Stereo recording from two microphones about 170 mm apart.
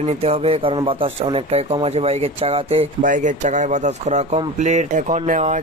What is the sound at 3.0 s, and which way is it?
Speech, 50° right (ahead or behind).